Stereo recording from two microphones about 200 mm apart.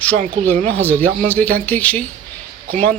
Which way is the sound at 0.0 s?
5° left (ahead or behind).